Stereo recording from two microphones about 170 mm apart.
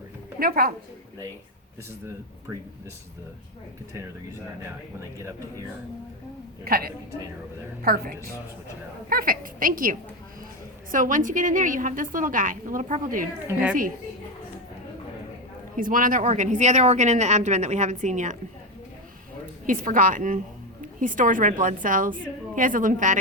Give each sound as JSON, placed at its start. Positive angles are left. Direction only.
{"t": 0.3, "sound": "a woman's voice", "side_deg": -60}
{"t": 6.7, "sound": "speech", "side_deg": -60}
{"t": 13.5, "sound": "a woman's voice", "side_deg": -10}
{"t": 15.7, "sound": "speech", "side_deg": -55}
{"t": 19.6, "sound": "speech", "side_deg": -50}